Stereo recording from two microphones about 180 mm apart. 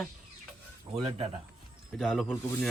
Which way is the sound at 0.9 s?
25° right (ahead or behind).